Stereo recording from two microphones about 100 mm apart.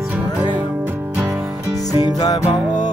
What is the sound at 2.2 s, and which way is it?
Music, 40° left (ahead or behind).